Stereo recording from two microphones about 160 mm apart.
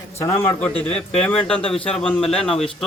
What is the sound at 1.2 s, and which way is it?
Speech, 5° left (ahead or behind).